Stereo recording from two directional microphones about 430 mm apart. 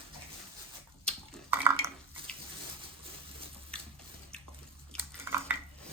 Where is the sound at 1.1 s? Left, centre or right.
Centre.